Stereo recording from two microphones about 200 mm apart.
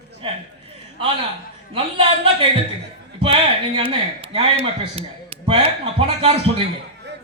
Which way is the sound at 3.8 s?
25° right (ahead or behind).